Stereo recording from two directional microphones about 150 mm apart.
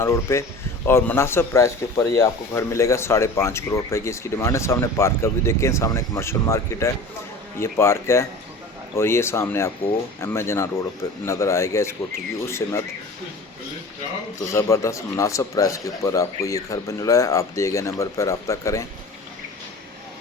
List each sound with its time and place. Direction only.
0.0 s speech: 20° left (ahead or behind)
14.5 s speech: 20° left (ahead or behind)